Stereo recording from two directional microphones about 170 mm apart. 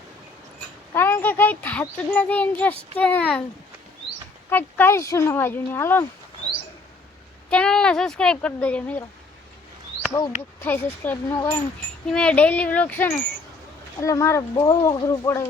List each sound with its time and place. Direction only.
0.9 s a child's voice: 15° left (ahead or behind)
4.4 s a child's voice: 10° left (ahead or behind)
7.5 s speech: 5° left (ahead or behind)
10.1 s speech: 25° left (ahead or behind)
10.6 s a child's voice: 10° left (ahead or behind)
12.0 s a child's voice: 5° left (ahead or behind)